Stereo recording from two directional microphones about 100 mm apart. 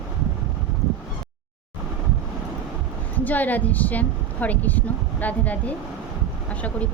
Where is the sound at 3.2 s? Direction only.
15° left (ahead or behind).